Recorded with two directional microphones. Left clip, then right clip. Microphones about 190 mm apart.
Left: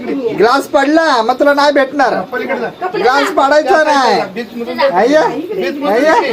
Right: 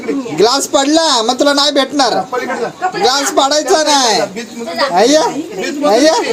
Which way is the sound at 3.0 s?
30° right (ahead or behind).